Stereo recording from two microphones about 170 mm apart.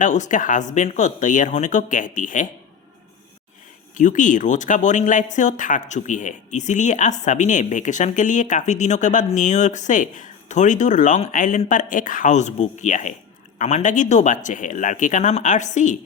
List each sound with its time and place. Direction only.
0.0 s speech: 45° left (ahead or behind)
3.9 s speech: 50° left (ahead or behind)